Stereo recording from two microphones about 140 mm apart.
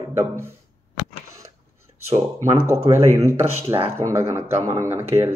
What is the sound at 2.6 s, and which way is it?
Speech, 20° right (ahead or behind).